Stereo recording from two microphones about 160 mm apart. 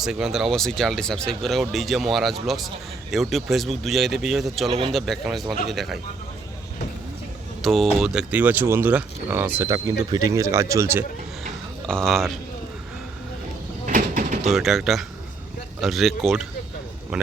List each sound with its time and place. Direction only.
0.0 s speech: 5° right (ahead or behind)
7.6 s speech: centre (ahead or behind); by 11.0 s 15° right (ahead or behind)
11.9 s speech: 5° left (ahead or behind)
13.8 s a sound: 60° right (ahead or behind)
14.4 s speech: centre (ahead or behind)